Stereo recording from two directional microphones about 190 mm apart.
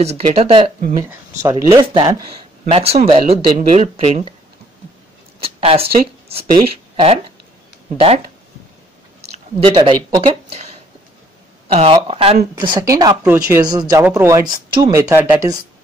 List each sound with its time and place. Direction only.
0.0 s speech: 35° right (ahead or behind)
1.0 s a woman's voice: 15° right (ahead or behind)
2.6 s speech: 35° right (ahead or behind)
5.4 s speech: 30° right (ahead or behind)
9.3 s speech: 30° right (ahead or behind)
11.7 s a woman's voice: 30° right (ahead or behind); by 15.6 s 10° right (ahead or behind)